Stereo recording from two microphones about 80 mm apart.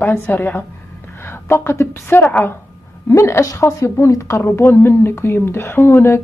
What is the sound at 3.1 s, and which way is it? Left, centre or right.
Speech, left.